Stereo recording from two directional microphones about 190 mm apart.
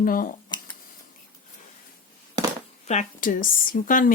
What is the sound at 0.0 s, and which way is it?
Speech, 45° left (ahead or behind).